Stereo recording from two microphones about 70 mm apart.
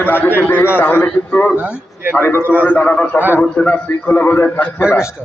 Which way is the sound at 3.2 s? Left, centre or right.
Right.